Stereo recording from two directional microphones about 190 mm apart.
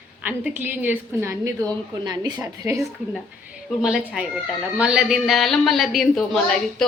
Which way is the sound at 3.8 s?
5° right (ahead or behind).